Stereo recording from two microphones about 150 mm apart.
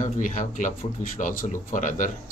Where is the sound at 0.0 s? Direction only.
60° left (ahead or behind).